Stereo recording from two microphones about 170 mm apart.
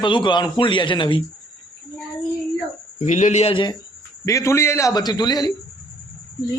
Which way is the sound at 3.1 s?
45° left (ahead or behind).